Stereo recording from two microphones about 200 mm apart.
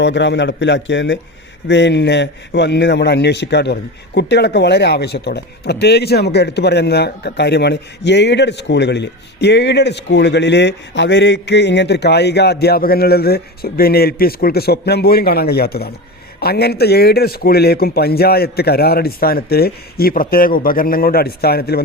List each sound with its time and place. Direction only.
0.0 s a man's voice: 60° left (ahead or behind)